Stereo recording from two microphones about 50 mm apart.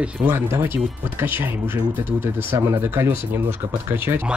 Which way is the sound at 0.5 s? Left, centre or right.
Right.